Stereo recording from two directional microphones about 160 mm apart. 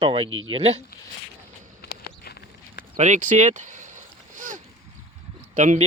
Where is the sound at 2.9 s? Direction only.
50° right (ahead or behind).